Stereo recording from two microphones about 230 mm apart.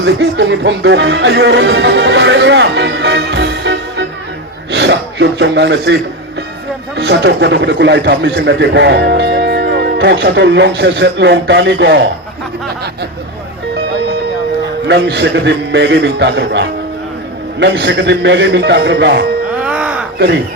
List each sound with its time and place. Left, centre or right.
0.0 s a man's voice: right
14.8 s a man's voice: right
19.5 s music: centre